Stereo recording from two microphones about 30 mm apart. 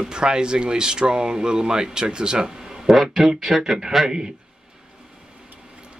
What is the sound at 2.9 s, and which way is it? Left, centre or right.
Speech, centre.